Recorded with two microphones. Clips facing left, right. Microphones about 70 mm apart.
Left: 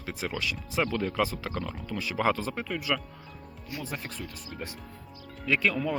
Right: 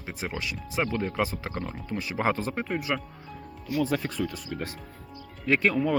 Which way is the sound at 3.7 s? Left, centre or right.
Right.